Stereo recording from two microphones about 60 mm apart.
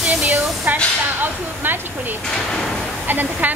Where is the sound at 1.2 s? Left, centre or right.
Right.